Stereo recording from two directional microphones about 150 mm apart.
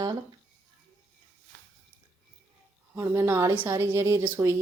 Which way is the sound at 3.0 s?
15° right (ahead or behind).